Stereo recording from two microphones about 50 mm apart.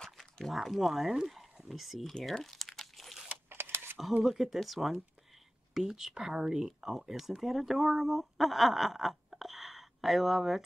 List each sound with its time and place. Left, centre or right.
0.0 s speech: centre
2.1 s crumpling: centre
3.4 s a sound: right
4.2 s speech: centre